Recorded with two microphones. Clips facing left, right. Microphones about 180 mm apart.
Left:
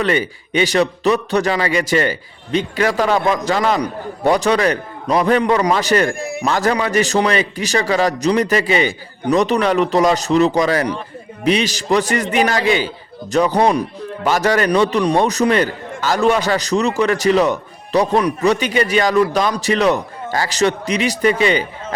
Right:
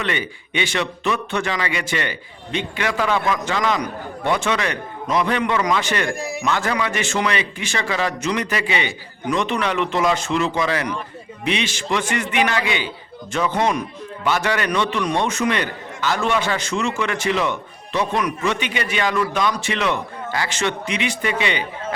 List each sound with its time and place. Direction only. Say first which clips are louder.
0.0 s a man's voice: left 7 dB; 40° left (ahead or behind)
6.1 s speech: left 2 dB; 55° left (ahead or behind)
6.4 s a man's voice: left 5 dB; 40° left (ahead or behind)